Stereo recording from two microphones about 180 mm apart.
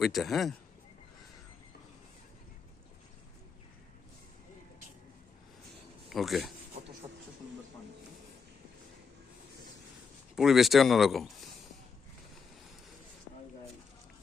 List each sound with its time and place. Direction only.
0.0 s speech: centre (ahead or behind)
6.1 s speech: centre (ahead or behind)
7.0 s a sound: 30° right (ahead or behind)
10.3 s speech: centre (ahead or behind)